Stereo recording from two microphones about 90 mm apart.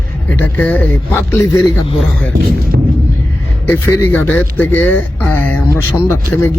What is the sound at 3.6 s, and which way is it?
Speech, 25° left (ahead or behind).